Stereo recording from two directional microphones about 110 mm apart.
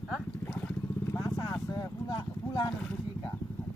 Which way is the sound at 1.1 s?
30° left (ahead or behind).